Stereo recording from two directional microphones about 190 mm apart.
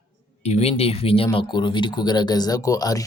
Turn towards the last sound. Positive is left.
turn(degrees=20)  # may be behind; listen again after turning